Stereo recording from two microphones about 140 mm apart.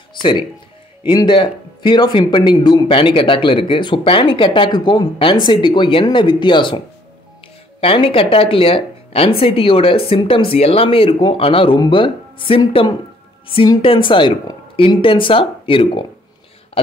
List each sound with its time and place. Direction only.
0.1 s speech: 35° left (ahead or behind)
7.8 s speech: 40° left (ahead or behind)